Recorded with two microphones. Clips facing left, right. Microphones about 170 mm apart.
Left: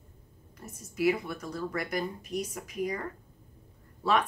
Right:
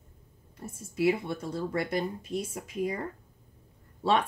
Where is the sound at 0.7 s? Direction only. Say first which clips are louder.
Right 1 dB; 30° right (ahead or behind).